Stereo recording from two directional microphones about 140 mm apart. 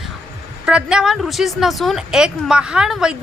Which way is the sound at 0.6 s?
5° right (ahead or behind).